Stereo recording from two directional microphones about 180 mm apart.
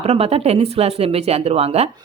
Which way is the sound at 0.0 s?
35° right (ahead or behind).